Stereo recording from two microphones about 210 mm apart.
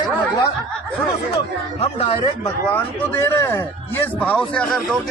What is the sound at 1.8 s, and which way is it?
Speech, 25° left (ahead or behind).